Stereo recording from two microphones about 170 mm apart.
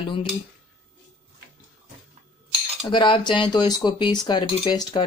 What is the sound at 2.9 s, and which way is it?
Speech, 25° left (ahead or behind).